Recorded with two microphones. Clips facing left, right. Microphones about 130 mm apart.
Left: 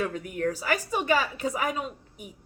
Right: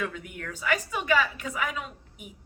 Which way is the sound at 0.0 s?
40° left (ahead or behind).